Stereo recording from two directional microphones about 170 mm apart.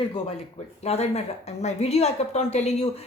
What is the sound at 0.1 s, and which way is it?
A woman's voice, 35° left (ahead or behind).